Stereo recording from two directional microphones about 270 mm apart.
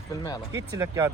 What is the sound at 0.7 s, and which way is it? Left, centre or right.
Speech, centre.